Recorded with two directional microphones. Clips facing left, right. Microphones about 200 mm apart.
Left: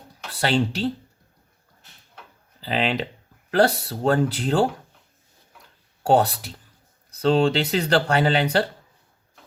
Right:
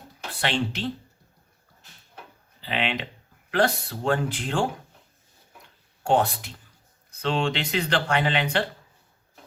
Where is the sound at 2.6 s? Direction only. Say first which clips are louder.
Left 4 dB; 35° left (ahead or behind).